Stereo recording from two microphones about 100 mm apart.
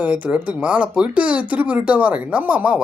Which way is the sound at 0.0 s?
15° right (ahead or behind).